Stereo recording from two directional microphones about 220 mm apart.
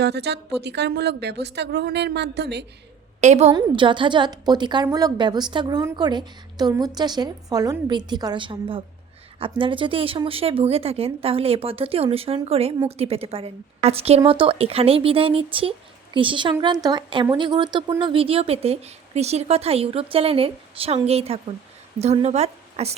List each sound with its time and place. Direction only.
0.0 s a woman's voice: 50° right (ahead or behind)
3.2 s a woman's voice: 30° right (ahead or behind)